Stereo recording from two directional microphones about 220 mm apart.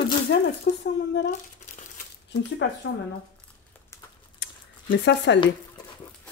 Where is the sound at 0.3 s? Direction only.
50° left (ahead or behind).